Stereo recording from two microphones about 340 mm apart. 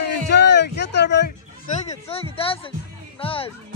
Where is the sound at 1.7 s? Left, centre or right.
Centre.